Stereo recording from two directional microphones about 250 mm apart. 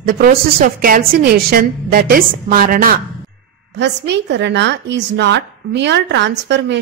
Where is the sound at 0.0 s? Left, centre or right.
Right.